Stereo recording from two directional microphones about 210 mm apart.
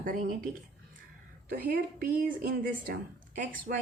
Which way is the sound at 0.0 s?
40° right (ahead or behind).